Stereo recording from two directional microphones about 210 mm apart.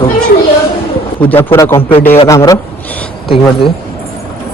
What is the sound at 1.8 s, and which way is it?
Speech, 25° left (ahead or behind).